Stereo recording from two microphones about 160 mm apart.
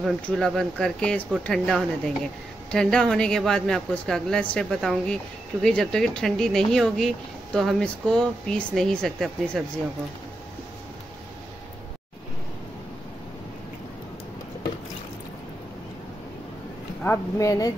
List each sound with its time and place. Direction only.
0.0 s a woman's voice: 5° left (ahead or behind)
17.0 s speech: 15° left (ahead or behind)